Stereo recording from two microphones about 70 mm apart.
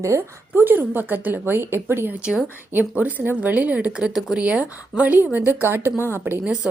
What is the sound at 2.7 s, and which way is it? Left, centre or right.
A woman's voice, right.